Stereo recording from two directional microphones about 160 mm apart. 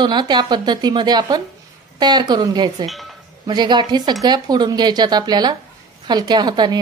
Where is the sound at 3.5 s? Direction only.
25° right (ahead or behind).